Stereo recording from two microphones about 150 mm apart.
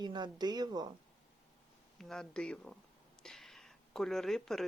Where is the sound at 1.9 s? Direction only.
Centre (ahead or behind).